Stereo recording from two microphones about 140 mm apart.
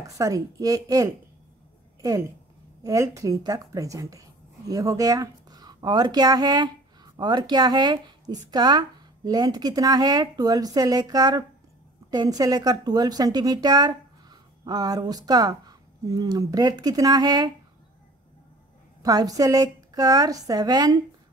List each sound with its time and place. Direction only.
0.0 s a woman's voice: 25° right (ahead or behind)
19.0 s speech: 25° right (ahead or behind)